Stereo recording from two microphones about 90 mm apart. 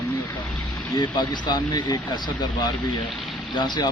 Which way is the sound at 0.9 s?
55° left (ahead or behind).